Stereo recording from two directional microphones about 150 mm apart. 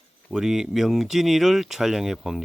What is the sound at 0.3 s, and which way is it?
Speech, 5° right (ahead or behind).